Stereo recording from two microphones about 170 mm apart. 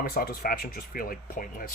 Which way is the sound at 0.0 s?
60° left (ahead or behind).